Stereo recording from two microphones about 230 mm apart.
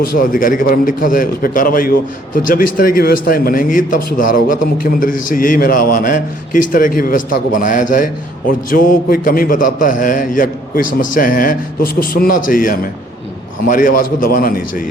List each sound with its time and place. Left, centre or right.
0.1 s a man's voice: left